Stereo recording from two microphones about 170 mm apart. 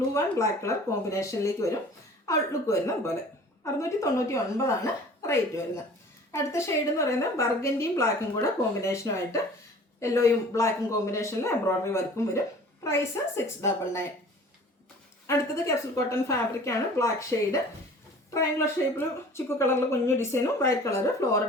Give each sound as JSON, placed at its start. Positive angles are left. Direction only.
{"t": 0.1, "sound": "a woman's voice", "side_deg": 15}
{"t": 15.3, "sound": "a woman's voice", "side_deg": 15}